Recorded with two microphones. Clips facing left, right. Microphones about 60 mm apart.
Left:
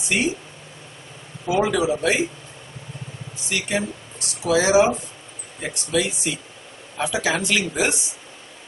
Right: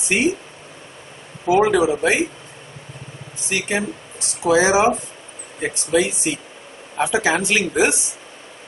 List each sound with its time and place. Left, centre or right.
0.1 s speech: right
1.4 s speech: right
3.4 s speech: right